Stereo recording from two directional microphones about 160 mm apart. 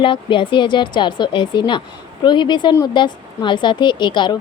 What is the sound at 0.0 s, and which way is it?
Speech, 30° left (ahead or behind).